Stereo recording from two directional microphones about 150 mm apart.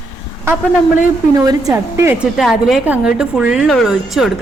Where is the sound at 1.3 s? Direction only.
25° right (ahead or behind).